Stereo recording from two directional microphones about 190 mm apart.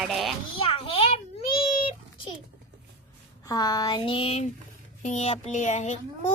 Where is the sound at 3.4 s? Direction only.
20° left (ahead or behind).